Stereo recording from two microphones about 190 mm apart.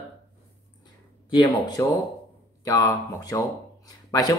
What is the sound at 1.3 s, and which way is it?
Speech, 25° left (ahead or behind).